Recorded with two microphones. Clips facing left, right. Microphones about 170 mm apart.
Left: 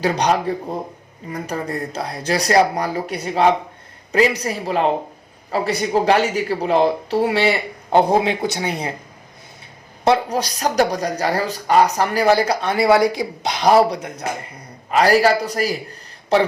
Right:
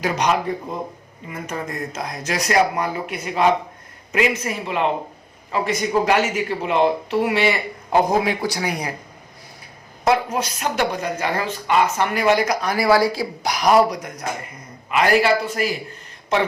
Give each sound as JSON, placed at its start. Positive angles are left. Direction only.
{"t": 0.0, "sound": "a woman's voice", "side_deg": 35}
{"t": 10.0, "sound": "a woman's voice", "side_deg": 30}